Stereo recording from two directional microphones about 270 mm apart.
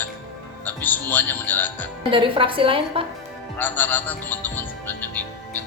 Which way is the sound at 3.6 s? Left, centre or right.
Centre.